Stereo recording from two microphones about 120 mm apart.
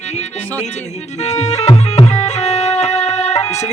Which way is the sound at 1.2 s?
65° left (ahead or behind).